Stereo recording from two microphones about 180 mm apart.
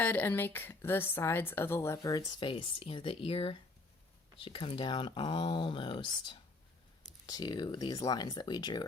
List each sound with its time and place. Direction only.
0.0 s a woman's voice: 10° left (ahead or behind)